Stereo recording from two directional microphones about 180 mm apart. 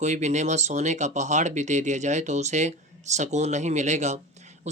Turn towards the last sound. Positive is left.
turn(degrees=-40)  # may be behind; listen again after turning